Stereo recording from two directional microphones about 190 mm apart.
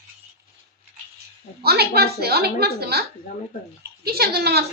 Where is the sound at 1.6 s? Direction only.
55° right (ahead or behind).